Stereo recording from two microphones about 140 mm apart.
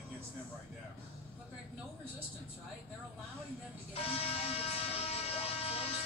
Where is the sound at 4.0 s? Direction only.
45° left (ahead or behind).